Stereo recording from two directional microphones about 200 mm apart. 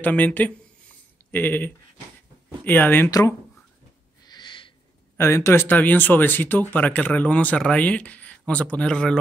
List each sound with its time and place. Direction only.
0.0 s speech: 10° left (ahead or behind)
4.2 s a sound: 20° left (ahead or behind)
5.1 s speech: 10° left (ahead or behind)